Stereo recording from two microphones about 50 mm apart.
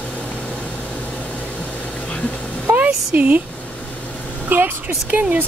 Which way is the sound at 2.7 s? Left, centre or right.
Right.